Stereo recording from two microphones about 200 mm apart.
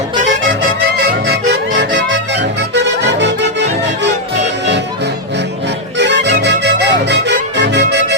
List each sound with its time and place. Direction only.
0.9 s music: 50° right (ahead or behind)
6.0 s music: 60° right (ahead or behind)